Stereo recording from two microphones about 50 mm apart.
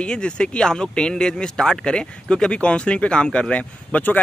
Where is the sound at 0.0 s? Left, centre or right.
Centre.